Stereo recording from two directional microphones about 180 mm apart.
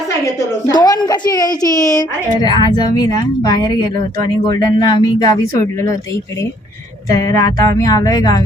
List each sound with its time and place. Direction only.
0.7 s a woman's voice: 25° left (ahead or behind)
7.1 s a woman's voice: 20° left (ahead or behind)